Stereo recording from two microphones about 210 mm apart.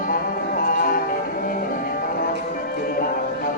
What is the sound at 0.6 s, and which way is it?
Music, 40° left (ahead or behind).